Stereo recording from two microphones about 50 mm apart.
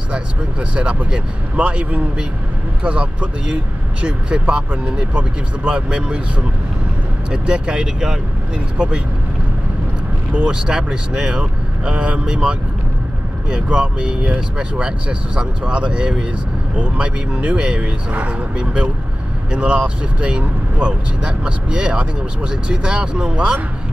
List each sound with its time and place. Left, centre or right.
0.1 s speech: right
7.2 s speech: centre
10.3 s speech: centre